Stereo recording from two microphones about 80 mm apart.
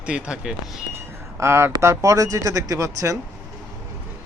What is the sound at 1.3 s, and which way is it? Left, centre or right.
Speech, right.